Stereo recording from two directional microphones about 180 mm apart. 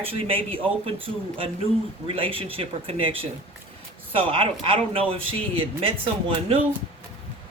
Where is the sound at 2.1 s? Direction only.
30° right (ahead or behind).